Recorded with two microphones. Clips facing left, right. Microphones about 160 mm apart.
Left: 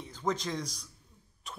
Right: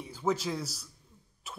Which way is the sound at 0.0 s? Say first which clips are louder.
Right 2 dB; 10° right (ahead or behind).